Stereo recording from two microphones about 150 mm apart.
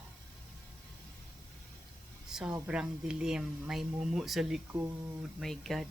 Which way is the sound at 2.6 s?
5° right (ahead or behind).